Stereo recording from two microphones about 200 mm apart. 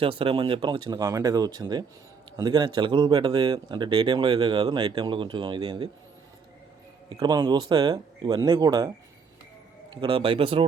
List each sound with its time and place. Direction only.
0.0 s speech: 25° right (ahead or behind)
7.1 s speech: 20° right (ahead or behind)
9.9 s speech: 25° right (ahead or behind)